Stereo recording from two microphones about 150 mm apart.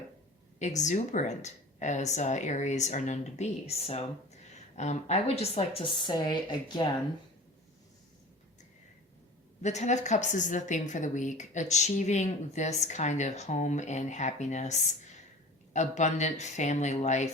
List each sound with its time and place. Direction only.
0.6 s a woman's voice: 50° left (ahead or behind); by 6.3 s 30° left (ahead or behind)
9.6 s speech: 50° left (ahead or behind)